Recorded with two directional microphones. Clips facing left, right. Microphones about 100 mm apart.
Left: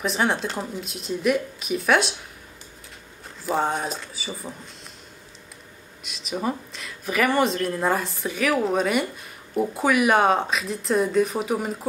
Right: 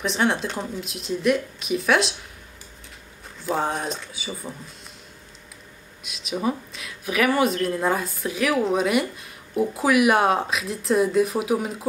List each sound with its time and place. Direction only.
0.0 s speech: centre (ahead or behind)
3.4 s speech: centre (ahead or behind)
6.0 s speech: centre (ahead or behind)